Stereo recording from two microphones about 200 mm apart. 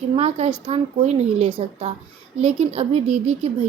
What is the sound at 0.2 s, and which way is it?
A woman's voice, 35° right (ahead or behind).